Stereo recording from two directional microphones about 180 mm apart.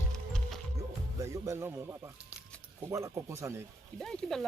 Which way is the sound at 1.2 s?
15° right (ahead or behind).